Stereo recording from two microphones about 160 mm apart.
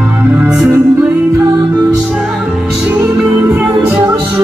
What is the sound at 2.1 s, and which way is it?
Music, 5° right (ahead or behind).